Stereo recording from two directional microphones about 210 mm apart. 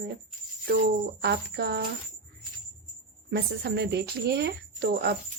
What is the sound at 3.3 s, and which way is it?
Speech, 50° right (ahead or behind).